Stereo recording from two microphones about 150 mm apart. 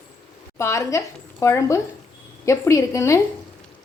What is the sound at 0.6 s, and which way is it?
A woman's voice, 20° left (ahead or behind).